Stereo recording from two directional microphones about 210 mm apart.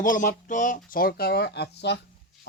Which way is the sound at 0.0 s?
40° left (ahead or behind).